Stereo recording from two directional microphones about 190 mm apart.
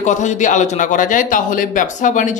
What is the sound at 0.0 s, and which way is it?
A man's voice, 40° left (ahead or behind).